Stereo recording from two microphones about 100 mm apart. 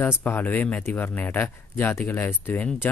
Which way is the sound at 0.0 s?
20° left (ahead or behind).